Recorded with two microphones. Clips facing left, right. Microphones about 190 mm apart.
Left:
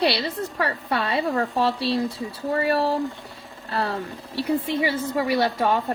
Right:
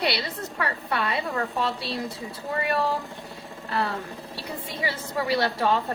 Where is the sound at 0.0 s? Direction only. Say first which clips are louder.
Left 5 dB; 30° left (ahead or behind).